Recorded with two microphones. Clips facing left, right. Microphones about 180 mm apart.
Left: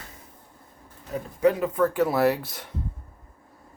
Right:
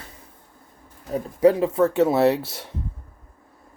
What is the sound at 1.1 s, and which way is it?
Speech, 30° right (ahead or behind).